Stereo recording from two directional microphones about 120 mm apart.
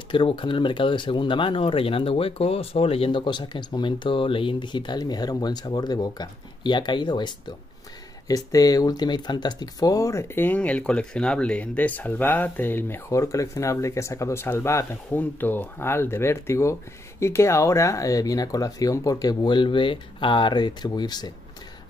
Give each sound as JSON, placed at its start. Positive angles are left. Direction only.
{"t": 0.1, "sound": "speech", "side_deg": 45}
{"t": 8.5, "sound": "speech", "side_deg": 30}